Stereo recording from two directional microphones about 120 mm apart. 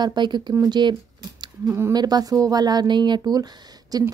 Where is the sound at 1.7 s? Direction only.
25° right (ahead or behind).